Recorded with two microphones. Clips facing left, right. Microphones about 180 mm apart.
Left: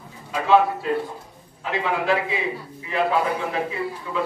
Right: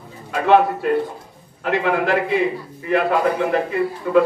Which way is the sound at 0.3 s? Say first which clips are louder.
Right 3 dB; 60° right (ahead or behind).